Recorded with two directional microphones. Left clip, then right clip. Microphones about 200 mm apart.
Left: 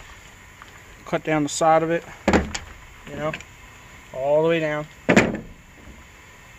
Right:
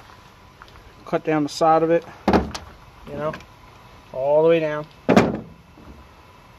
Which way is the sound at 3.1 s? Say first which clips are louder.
Right 1 dB; centre (ahead or behind).